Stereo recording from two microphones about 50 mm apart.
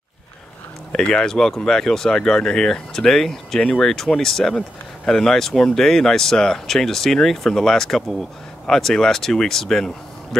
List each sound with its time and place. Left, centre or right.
0.9 s speech: centre